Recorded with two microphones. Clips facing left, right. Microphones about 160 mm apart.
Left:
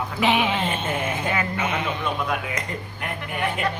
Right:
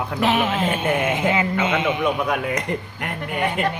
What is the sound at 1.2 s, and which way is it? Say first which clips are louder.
Speech: right 5 dB; 20° right (ahead or behind).